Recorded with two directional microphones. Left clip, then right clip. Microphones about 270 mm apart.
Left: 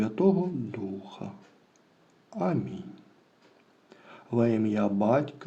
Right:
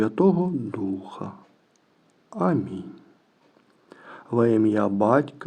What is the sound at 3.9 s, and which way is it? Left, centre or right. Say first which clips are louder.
Speech: right 5 dB; right.